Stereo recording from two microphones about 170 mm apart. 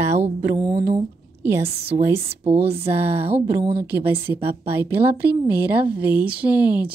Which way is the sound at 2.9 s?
10° right (ahead or behind).